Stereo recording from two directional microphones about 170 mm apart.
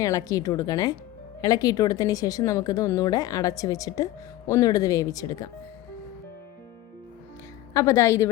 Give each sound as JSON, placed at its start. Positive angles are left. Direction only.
{"t": 0.0, "sound": "speech", "side_deg": 20}
{"t": 7.7, "sound": "a woman's voice", "side_deg": 20}